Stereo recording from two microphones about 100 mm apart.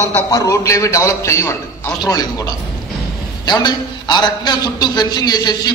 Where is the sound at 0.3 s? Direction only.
35° left (ahead or behind).